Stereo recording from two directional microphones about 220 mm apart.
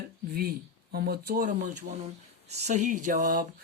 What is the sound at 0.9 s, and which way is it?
Speech, 45° right (ahead or behind).